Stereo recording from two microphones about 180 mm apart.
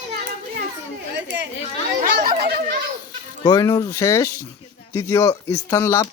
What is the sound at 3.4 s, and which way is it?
Speech, 20° left (ahead or behind).